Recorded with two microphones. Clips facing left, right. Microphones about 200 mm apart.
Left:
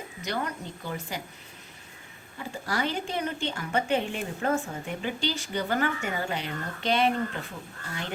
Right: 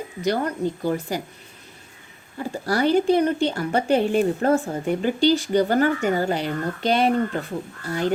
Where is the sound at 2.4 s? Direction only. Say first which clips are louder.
Right 8 dB; 40° right (ahead or behind).